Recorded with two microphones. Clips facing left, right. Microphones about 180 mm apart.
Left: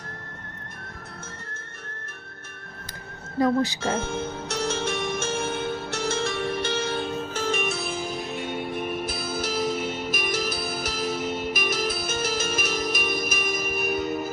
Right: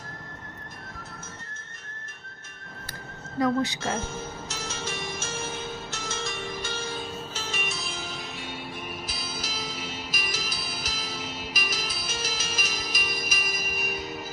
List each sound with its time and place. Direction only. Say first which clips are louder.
3.4 s speech: left 3 dB; 30° left (ahead or behind)
3.9 s music: left 5 dB; 65° left (ahead or behind)